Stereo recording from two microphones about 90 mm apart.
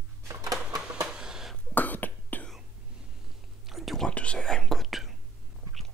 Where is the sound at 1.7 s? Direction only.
20° left (ahead or behind).